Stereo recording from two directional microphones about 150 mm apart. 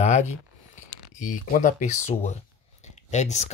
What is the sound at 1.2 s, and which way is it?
Speech, 60° left (ahead or behind).